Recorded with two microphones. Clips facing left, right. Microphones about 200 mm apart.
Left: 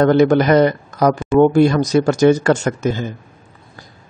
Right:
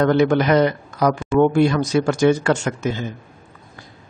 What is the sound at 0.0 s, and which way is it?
Speech, 40° left (ahead or behind).